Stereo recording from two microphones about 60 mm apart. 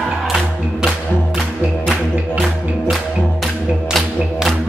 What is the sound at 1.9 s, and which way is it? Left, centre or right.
Music, centre.